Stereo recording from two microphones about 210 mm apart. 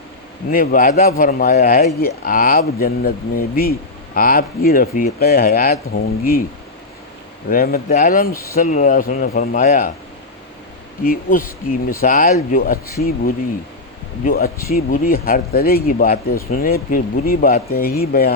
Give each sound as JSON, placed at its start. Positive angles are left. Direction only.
{"t": 0.5, "sound": "a man's voice", "side_deg": 40}
{"t": 7.5, "sound": "a man's voice", "side_deg": 45}
{"t": 8.3, "sound": "speech", "side_deg": 15}
{"t": 8.5, "sound": "speech", "side_deg": 35}
{"t": 11.0, "sound": "speech", "side_deg": 40}
{"t": 14.3, "sound": "a man's voice", "side_deg": 45}